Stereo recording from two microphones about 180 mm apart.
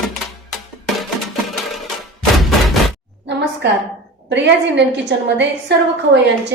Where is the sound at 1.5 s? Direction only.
Centre (ahead or behind).